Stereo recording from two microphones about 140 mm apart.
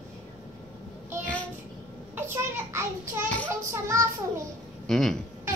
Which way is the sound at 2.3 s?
20° right (ahead or behind).